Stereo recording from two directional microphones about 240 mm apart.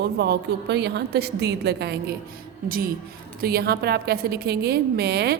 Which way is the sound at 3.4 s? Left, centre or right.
Right.